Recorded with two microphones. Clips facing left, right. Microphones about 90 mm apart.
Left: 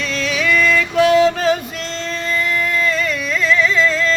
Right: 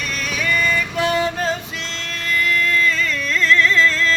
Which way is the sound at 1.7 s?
45° left (ahead or behind).